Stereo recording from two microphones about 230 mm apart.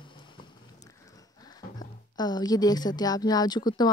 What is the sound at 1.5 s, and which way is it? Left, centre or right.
Speech, centre.